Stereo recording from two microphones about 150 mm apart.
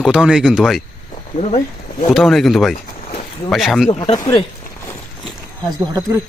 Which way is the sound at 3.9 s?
30° left (ahead or behind).